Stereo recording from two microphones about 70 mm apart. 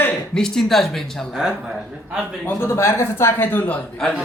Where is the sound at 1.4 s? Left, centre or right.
Centre.